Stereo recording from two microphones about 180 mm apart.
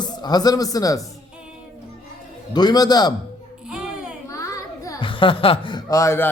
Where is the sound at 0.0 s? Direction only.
25° left (ahead or behind).